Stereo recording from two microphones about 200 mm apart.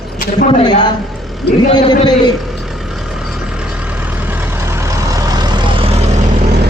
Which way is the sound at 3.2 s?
5° right (ahead or behind).